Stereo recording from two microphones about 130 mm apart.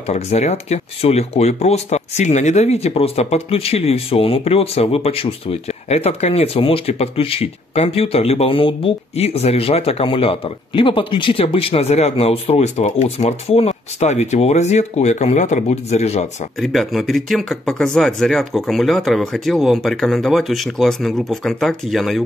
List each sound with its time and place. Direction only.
0.0 s speech: 60° left (ahead or behind)
16.5 s speech: centre (ahead or behind)